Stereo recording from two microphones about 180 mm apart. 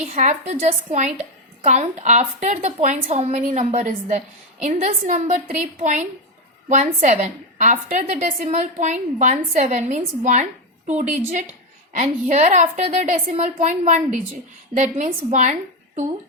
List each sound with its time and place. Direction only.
0.1 s a woman's voice: 40° right (ahead or behind)
6.7 s a woman's voice: 40° right (ahead or behind)